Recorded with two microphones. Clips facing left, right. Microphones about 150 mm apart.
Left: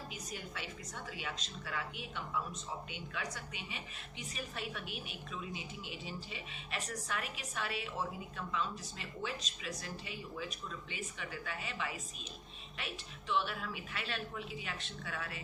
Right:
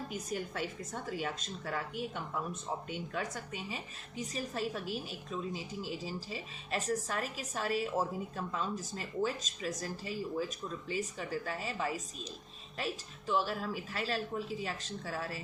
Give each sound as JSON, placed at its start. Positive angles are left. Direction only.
{"t": 0.1, "sound": "a woman's voice", "side_deg": -45}